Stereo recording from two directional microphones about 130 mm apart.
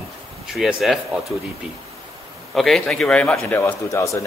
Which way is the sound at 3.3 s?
20° left (ahead or behind).